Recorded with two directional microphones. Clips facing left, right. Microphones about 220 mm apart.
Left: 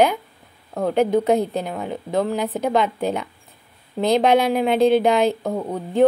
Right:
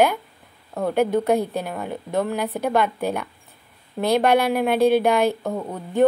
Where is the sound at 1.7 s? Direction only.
5° right (ahead or behind).